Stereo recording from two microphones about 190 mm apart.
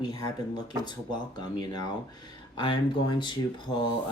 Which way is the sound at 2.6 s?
25° left (ahead or behind).